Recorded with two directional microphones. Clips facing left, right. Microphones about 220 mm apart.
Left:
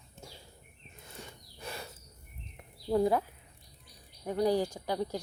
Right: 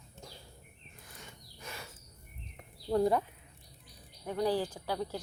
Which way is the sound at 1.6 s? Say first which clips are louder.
Left 4 dB; 35° left (ahead or behind).